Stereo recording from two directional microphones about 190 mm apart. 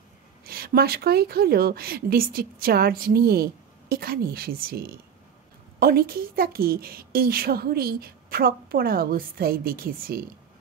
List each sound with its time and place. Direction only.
0.5 s a woman's voice: 55° right (ahead or behind)